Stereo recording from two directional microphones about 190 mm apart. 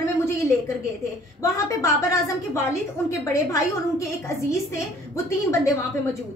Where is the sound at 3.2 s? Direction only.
15° left (ahead or behind).